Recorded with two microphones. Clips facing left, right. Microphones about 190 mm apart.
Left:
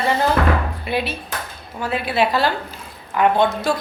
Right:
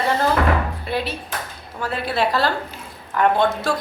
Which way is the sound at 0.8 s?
20° left (ahead or behind).